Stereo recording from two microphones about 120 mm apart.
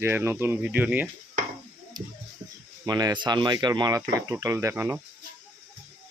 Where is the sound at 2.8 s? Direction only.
35° right (ahead or behind); by 5.0 s 15° right (ahead or behind).